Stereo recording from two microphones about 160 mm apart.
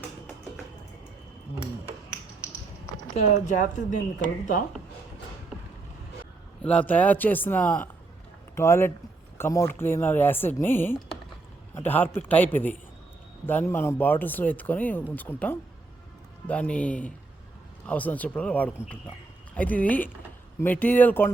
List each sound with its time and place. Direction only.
3.2 s speech: 50° left (ahead or behind)
6.6 s speech: 10° left (ahead or behind)